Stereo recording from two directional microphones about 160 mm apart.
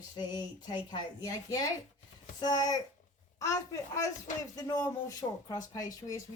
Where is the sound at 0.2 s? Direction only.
25° left (ahead or behind).